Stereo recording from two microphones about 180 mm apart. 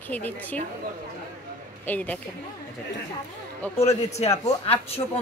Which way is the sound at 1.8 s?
10° left (ahead or behind).